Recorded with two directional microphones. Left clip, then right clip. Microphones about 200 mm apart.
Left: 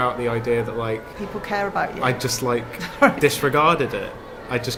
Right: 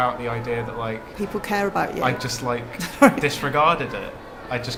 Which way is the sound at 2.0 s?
55° left (ahead or behind).